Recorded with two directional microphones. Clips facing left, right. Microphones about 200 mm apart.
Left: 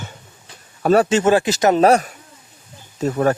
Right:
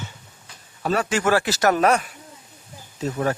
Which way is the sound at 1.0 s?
25° left (ahead or behind).